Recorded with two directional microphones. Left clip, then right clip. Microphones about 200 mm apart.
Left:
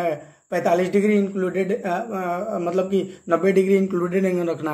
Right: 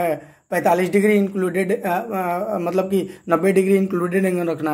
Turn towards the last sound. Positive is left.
turn(degrees=-25)  # may be behind; listen again after turning